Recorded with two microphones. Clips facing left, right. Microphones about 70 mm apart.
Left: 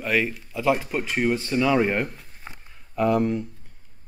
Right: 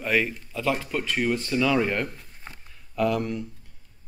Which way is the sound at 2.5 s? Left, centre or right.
Centre.